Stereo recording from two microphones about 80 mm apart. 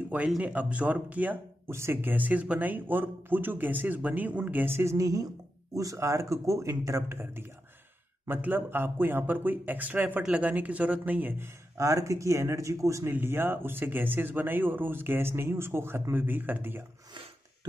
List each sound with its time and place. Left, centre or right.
0.4 s speech: centre
1.7 s speech: right
13.1 s speech: right